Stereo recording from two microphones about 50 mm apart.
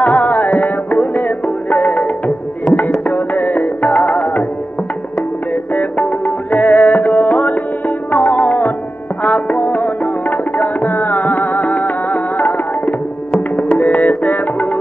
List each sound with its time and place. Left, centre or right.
0.0 s music: left
5.5 s music: left
9.2 s tabla: left